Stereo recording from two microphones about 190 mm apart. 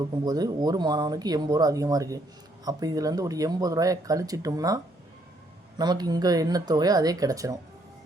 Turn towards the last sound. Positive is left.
turn(degrees=-15)  # may be behind; listen again after turning